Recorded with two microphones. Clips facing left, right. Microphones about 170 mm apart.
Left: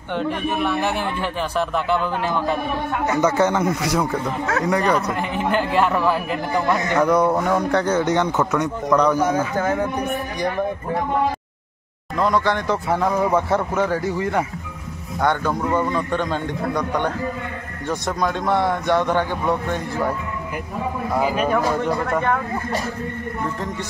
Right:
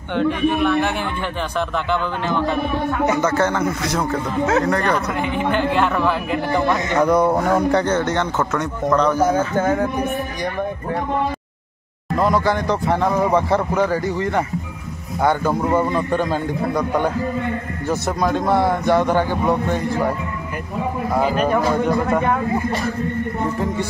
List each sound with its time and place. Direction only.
0.1 s a man's voice: centre (ahead or behind)
4.9 s speech: centre (ahead or behind)
7.9 s a man's voice: 15° left (ahead or behind)
12.2 s speech: 5° right (ahead or behind)
15.1 s a man's voice: 5° right (ahead or behind)
21.2 s speech: 5° left (ahead or behind)
22.0 s a man's voice: 10° right (ahead or behind)